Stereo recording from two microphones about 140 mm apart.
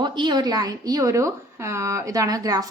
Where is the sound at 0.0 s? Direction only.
30° right (ahead or behind).